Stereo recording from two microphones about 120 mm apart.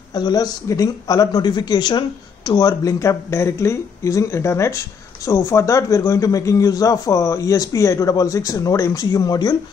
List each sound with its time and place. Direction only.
0.1 s speech: 35° left (ahead or behind)